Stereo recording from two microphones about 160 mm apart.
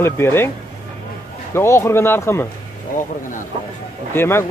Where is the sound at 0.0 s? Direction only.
15° left (ahead or behind).